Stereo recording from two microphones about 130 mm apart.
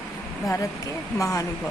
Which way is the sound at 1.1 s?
25° left (ahead or behind).